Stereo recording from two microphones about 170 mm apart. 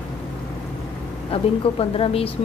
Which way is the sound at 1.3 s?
35° left (ahead or behind).